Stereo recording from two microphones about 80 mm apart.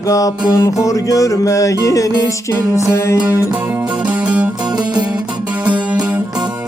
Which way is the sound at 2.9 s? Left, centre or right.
Left.